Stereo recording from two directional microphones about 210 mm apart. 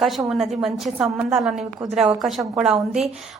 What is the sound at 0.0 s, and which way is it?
A woman's voice, 5° right (ahead or behind).